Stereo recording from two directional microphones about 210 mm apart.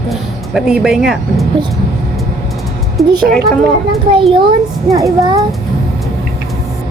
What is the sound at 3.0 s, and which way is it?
Speech, centre (ahead or behind).